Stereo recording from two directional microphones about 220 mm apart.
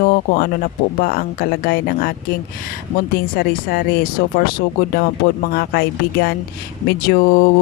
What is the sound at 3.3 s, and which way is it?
Speech, 45° left (ahead or behind).